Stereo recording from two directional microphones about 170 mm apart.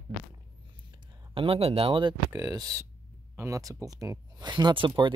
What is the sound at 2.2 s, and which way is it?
Speech, 15° right (ahead or behind).